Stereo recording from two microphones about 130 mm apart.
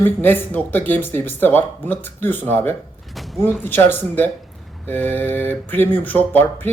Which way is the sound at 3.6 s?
15° left (ahead or behind).